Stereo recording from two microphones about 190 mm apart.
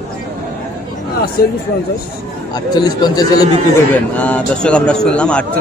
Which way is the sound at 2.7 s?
20° left (ahead or behind).